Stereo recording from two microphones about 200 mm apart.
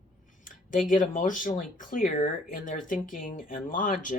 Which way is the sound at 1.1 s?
40° left (ahead or behind).